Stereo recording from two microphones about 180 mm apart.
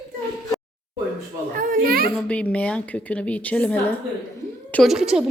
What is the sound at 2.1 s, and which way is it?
A woman's voice, 5° left (ahead or behind).